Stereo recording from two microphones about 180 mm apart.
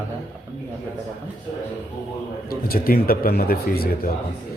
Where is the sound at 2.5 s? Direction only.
55° left (ahead or behind).